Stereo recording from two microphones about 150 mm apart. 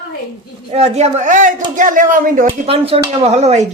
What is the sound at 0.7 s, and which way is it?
Speech, 45° right (ahead or behind).